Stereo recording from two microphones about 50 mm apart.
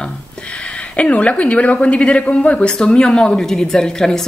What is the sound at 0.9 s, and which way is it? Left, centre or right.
Speech, left.